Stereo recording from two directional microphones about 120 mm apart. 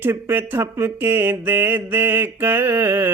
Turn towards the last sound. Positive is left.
turn(degrees=-20)  # may be behind; listen again after turning